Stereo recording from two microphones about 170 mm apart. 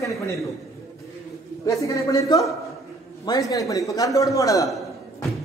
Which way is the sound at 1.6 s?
20° left (ahead or behind).